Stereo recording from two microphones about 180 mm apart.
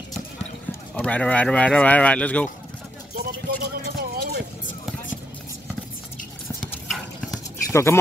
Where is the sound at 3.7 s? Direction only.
60° right (ahead or behind).